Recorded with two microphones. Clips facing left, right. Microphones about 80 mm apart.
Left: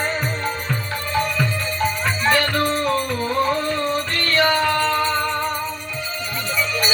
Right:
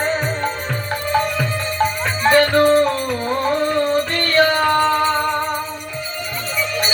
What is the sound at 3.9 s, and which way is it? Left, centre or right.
Music, right.